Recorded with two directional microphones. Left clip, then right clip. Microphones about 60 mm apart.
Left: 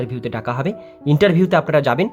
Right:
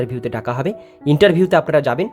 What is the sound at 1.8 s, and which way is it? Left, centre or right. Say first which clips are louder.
Speech: even; centre.